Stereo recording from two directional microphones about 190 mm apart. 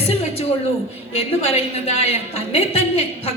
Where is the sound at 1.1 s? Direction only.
30° left (ahead or behind).